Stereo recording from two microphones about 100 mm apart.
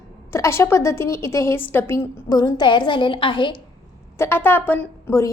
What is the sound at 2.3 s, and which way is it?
A woman's voice, 40° left (ahead or behind).